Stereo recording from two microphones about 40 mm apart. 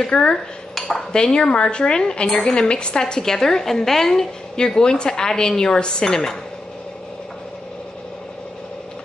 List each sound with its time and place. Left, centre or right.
0.0 s a woman's voice: centre
0.7 s dishes: centre
1.1 s a woman's voice: centre